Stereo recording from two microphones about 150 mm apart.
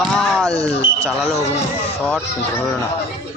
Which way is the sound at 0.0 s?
5° left (ahead or behind).